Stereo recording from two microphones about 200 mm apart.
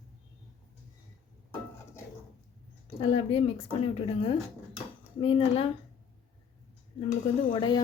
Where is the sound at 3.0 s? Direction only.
25° left (ahead or behind).